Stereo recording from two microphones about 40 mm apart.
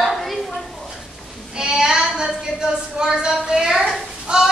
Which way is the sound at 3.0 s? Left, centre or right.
Centre.